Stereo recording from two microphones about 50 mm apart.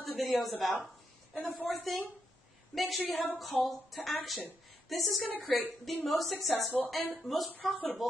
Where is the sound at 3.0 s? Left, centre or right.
Left.